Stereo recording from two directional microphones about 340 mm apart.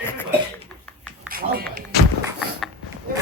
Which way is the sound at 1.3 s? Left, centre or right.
Right.